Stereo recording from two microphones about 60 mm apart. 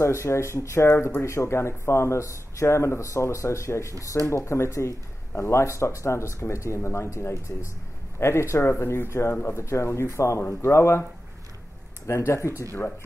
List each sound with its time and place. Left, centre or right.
0.0 s speech: left
4.1 s speech: left
4.5 s speech: left
12.1 s speech: left